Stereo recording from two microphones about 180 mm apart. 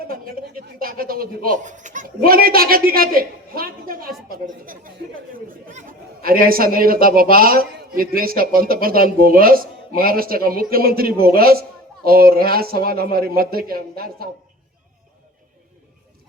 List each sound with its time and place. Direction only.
0.1 s a woman's voice: 55° right (ahead or behind)